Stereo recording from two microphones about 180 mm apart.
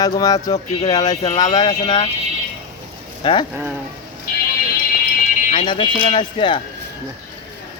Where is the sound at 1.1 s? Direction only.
35° left (ahead or behind).